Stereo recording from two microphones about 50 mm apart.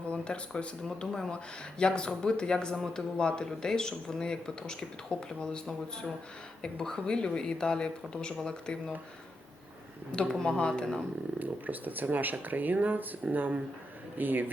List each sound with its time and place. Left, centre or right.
0.1 s speech: left
10.1 s speech: centre
11.3 s speech: right